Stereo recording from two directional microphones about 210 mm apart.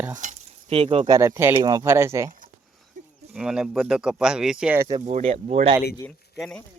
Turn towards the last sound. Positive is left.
turn(degrees=5)  # may be behind; listen again after turning